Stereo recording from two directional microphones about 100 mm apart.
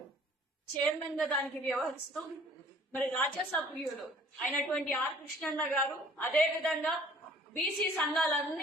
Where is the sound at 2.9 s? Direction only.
15° left (ahead or behind).